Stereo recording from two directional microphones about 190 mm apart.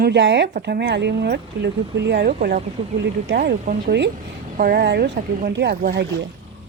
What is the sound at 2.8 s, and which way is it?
Speech, 30° right (ahead or behind).